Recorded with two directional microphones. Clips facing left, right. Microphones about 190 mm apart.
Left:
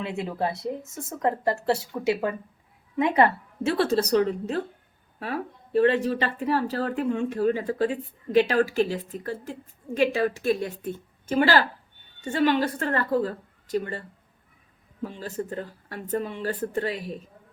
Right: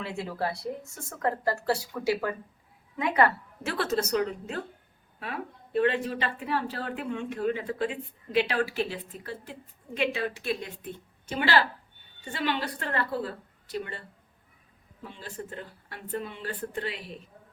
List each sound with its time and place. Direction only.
0.0 s a woman's voice: 20° left (ahead or behind); by 14.0 s 40° left (ahead or behind)
15.0 s a woman's voice: 40° left (ahead or behind)